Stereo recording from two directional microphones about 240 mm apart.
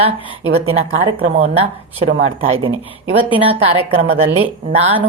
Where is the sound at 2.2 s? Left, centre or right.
Right.